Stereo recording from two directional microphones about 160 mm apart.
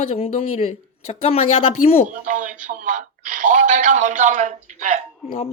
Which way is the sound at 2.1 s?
55° right (ahead or behind).